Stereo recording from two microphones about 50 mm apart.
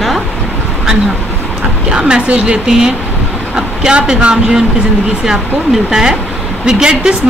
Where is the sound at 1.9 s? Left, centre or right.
Centre.